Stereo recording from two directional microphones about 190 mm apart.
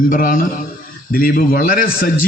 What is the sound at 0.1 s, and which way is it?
A man's voice, 45° left (ahead or behind).